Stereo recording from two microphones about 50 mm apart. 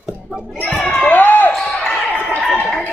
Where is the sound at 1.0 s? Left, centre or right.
Left.